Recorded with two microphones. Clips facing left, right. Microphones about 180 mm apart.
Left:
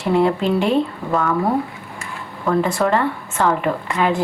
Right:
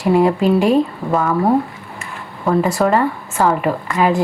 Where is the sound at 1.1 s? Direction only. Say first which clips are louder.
Right 3 dB; 25° right (ahead or behind).